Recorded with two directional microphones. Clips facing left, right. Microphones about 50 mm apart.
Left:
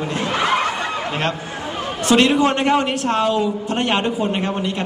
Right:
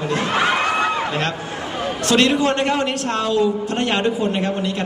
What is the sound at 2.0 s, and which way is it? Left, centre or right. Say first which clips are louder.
A man's voice: left 2 dB; left.